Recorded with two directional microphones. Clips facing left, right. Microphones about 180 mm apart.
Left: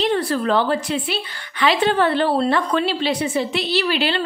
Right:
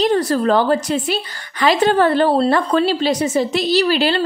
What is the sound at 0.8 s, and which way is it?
A woman's voice, 45° right (ahead or behind).